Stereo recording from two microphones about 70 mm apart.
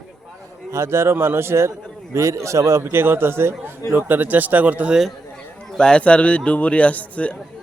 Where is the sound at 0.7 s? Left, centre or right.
Right.